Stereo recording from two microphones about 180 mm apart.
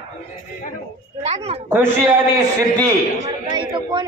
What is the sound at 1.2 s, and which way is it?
Speech, 35° right (ahead or behind).